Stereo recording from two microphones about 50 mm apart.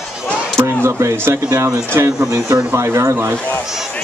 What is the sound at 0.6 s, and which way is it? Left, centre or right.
A man's voice, right.